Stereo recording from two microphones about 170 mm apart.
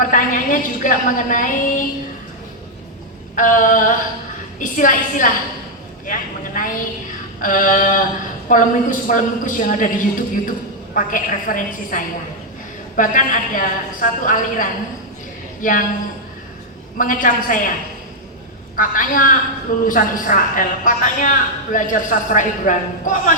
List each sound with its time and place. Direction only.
0.0 s a woman's voice: 50° left (ahead or behind)
3.3 s a woman's voice: 50° left (ahead or behind)
17.0 s a woman's voice: 50° left (ahead or behind)
18.8 s a woman's voice: 55° left (ahead or behind)